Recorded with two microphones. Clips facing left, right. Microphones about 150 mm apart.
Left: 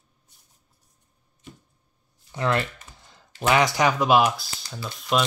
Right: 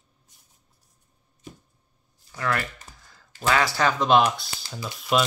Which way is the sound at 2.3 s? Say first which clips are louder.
Left 3 dB; 25° left (ahead or behind).